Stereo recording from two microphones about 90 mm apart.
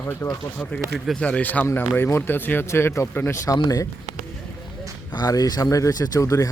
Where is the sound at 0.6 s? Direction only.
15° left (ahead or behind); by 3.6 s 35° left (ahead or behind).